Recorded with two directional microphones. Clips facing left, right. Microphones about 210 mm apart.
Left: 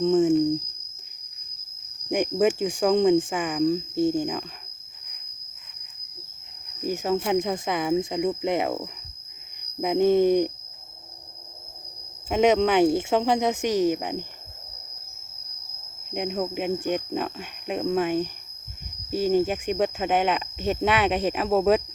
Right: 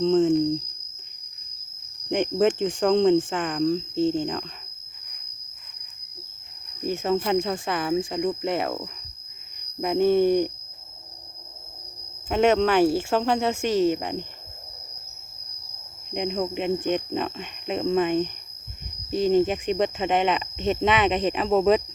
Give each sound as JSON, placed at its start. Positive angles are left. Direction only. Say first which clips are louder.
{"t": 0.0, "sound": "speech", "louder": "even", "side_deg": 10}
{"t": 2.0, "sound": "speech", "louder": "right 1 dB", "side_deg": 10}
{"t": 6.8, "sound": "speech", "louder": "right 1 dB", "side_deg": 10}
{"t": 12.3, "sound": "speech", "louder": "even", "side_deg": 15}
{"t": 16.1, "sound": "speech", "louder": "right 1 dB", "side_deg": 5}